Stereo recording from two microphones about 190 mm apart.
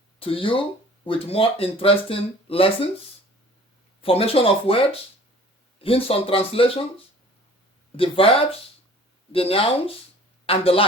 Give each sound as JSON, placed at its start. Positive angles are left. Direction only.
{"t": 0.2, "sound": "speech", "side_deg": 30}
{"t": 4.0, "sound": "speech", "side_deg": 30}
{"t": 7.9, "sound": "speech", "side_deg": 30}
{"t": 9.3, "sound": "speech", "side_deg": 30}